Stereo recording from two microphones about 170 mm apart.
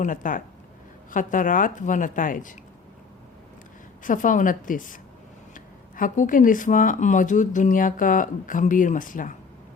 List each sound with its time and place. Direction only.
0.0 s speech: 50° left (ahead or behind)
4.0 s speech: 50° left (ahead or behind)